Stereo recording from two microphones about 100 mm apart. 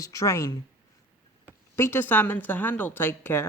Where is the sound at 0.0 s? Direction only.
35° left (ahead or behind).